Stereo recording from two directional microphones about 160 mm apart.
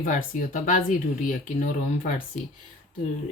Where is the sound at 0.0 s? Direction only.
55° left (ahead or behind).